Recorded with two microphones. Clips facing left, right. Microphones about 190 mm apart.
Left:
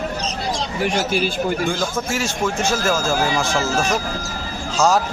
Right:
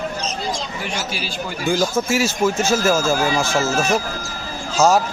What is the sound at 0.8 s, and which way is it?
Speech, 55° left (ahead or behind).